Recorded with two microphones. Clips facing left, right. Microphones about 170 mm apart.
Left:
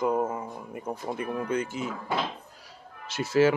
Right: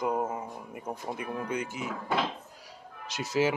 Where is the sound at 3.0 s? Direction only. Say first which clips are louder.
Left 5 dB; 15° right (ahead or behind).